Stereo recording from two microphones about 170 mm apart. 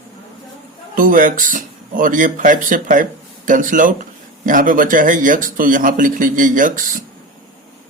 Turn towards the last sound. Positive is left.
turn(degrees=-50)  # may be behind; listen again after turning